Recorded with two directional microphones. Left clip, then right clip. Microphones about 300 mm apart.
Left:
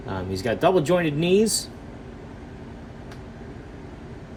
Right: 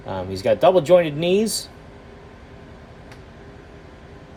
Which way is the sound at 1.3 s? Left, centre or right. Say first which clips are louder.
Left 1 dB; right.